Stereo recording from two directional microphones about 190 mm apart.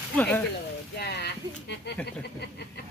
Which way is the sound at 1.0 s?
60° left (ahead or behind).